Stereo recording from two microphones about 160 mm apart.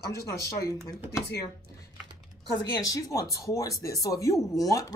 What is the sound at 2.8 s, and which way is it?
Speech, 20° left (ahead or behind).